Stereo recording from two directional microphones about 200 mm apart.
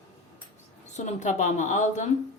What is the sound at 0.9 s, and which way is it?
A woman's voice, 35° left (ahead or behind).